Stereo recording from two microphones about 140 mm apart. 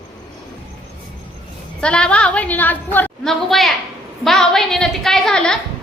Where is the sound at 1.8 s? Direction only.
5° left (ahead or behind).